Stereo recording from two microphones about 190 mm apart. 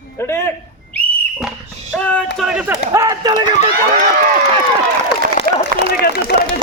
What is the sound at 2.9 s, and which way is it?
Speech, 15° right (ahead or behind).